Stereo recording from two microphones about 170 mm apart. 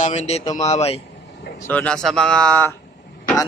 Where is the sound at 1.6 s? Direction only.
10° left (ahead or behind).